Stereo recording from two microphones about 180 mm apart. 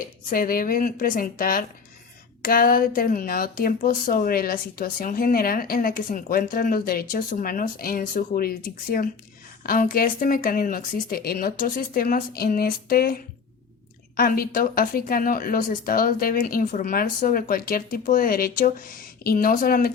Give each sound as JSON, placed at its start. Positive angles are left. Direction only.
{"t": 0.3, "sound": "speech", "side_deg": 55}
{"t": 14.2, "sound": "speech", "side_deg": 55}